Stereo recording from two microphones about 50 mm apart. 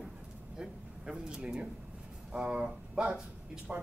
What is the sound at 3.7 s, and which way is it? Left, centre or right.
Speech, right.